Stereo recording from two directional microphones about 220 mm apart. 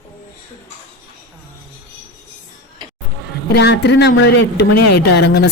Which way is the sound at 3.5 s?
50° left (ahead or behind).